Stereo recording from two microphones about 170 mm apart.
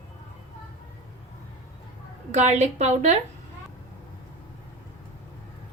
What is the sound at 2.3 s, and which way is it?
Speech, 40° right (ahead or behind).